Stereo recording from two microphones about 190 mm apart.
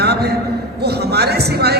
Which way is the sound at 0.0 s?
60° right (ahead or behind).